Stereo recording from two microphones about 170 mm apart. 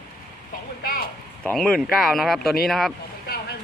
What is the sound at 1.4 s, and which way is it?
Speech, 5° left (ahead or behind).